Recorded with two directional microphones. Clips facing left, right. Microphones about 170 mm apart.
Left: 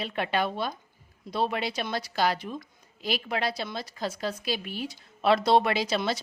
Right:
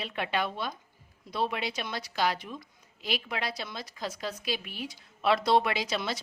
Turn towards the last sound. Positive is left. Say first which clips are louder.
# left 4 dB
turn(degrees=30)  # may be behind; listen again after turning